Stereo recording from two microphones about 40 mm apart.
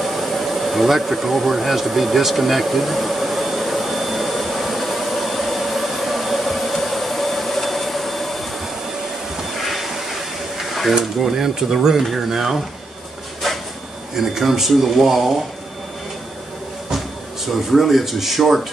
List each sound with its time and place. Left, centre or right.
0.0 s a sound: centre
9.4 s music: centre
10.6 s a sound: centre
11.0 s speech: centre
14.1 s speech: centre
17.5 s speech: centre